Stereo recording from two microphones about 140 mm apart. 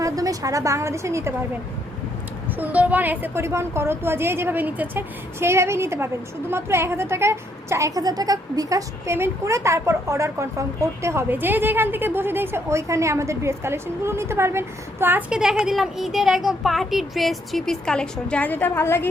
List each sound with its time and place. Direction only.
0.0 s a woman's voice: 25° right (ahead or behind)
2.6 s a woman's voice: 10° right (ahead or behind)
15.4 s speech: 5° right (ahead or behind); by 19.0 s 15° left (ahead or behind)